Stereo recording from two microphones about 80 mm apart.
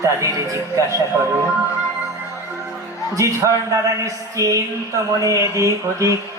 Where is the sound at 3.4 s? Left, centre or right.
Right.